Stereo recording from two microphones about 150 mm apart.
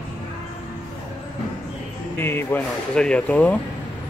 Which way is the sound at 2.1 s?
15° left (ahead or behind).